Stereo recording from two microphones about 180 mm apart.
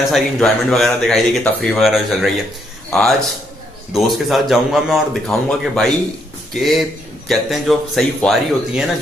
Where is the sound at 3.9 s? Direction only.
Centre (ahead or behind).